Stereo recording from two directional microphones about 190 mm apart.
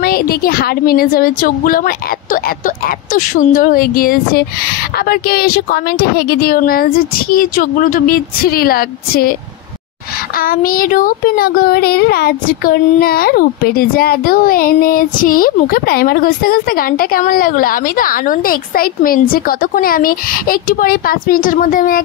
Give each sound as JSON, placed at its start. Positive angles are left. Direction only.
{"t": 0.0, "sound": "speech", "side_deg": 50}
{"t": 10.3, "sound": "speech", "side_deg": 50}